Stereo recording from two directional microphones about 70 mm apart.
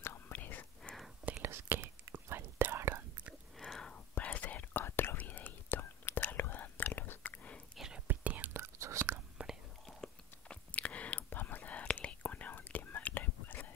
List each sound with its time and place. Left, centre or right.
0.0 s whispering: left
1.4 s whispering: right
3.6 s whispering: centre
8.1 s whispering: right
8.5 s whispering: right
9.8 s chewing: centre; by 13.7 s left